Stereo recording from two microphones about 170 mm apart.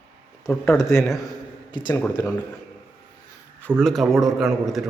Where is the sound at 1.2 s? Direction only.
25° left (ahead or behind).